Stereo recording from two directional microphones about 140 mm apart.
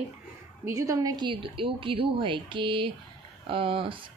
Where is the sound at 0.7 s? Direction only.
25° right (ahead or behind).